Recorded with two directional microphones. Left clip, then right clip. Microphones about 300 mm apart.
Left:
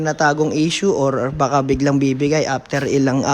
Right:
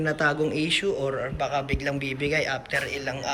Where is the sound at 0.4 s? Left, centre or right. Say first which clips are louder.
Left 7 dB; centre.